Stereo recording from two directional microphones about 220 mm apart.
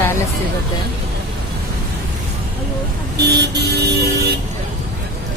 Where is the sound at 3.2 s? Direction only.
50° right (ahead or behind).